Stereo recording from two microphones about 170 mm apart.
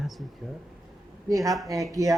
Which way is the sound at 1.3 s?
20° right (ahead or behind).